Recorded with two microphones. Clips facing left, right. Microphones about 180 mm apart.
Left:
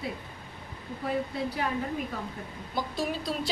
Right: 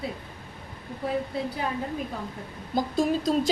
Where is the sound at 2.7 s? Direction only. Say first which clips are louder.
Right 7 dB; 45° right (ahead or behind).